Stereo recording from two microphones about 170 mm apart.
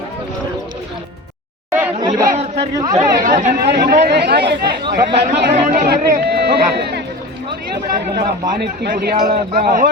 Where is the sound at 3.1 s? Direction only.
50° right (ahead or behind).